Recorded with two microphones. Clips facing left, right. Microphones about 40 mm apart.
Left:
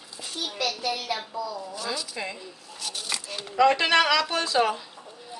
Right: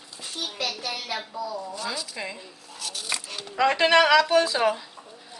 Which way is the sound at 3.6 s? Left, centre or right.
Centre.